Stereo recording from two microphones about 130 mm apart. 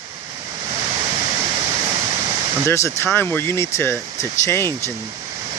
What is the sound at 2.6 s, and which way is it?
Speech, 20° left (ahead or behind).